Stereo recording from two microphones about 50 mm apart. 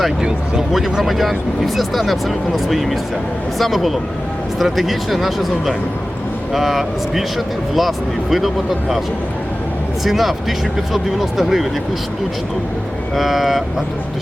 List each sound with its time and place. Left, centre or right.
0.2 s speech: centre
1.0 s speech: centre
10.0 s speech: centre
13.1 s speech: centre